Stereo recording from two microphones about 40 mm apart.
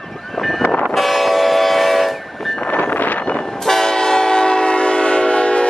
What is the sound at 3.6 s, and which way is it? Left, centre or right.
Train, centre.